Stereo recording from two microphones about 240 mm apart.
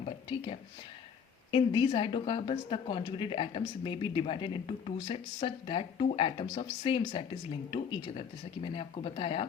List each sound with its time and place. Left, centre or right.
0.0 s whispering: left
1.5 s a woman's voice: centre